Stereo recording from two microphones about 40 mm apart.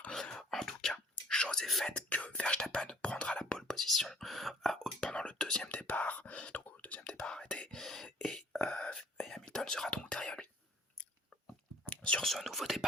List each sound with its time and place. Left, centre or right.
0.1 s whispering: centre
1.9 s whispering: left
3.6 s whispering: centre
5.1 s whispering: left
5.4 s whispering: centre
5.6 s whispering: left
7.7 s a sound: centre
8.0 s whispering: centre
11.9 s whispering: left
12.2 s whispering: centre